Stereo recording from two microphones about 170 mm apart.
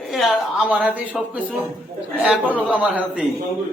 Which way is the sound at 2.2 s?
5° right (ahead or behind).